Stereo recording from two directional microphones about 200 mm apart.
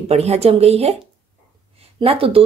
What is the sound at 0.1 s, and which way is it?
Speech, 30° right (ahead or behind).